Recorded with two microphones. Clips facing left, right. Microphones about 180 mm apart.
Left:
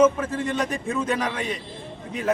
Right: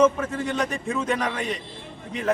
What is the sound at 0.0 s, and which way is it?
A man's voice, centre (ahead or behind).